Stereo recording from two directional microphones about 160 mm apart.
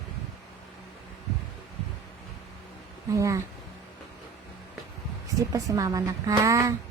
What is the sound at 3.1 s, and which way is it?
Speech, 20° right (ahead or behind).